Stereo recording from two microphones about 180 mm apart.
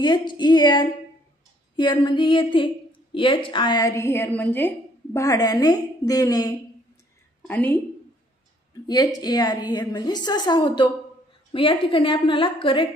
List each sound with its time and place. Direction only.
0.0 s a woman's voice: 25° left (ahead or behind)
7.4 s speech: 10° left (ahead or behind)
8.8 s a woman's voice: 20° left (ahead or behind)